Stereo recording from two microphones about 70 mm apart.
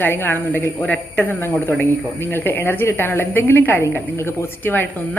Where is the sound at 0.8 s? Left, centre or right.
Centre.